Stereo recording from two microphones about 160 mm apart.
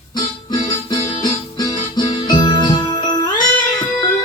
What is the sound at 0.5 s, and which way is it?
Music, 25° left (ahead or behind).